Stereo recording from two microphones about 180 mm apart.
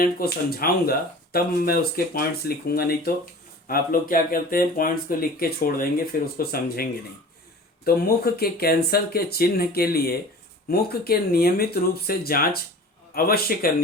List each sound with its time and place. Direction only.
0.0 s speech: 55° left (ahead or behind)
7.9 s speech: 60° left (ahead or behind)